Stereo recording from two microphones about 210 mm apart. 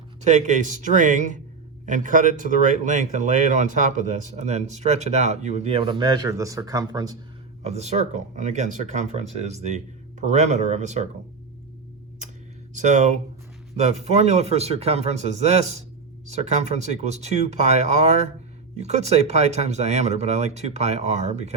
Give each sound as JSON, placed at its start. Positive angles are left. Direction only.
{"t": 0.2, "sound": "speech", "side_deg": -35}
{"t": 7.6, "sound": "speech", "side_deg": -30}
{"t": 12.7, "sound": "speech", "side_deg": -35}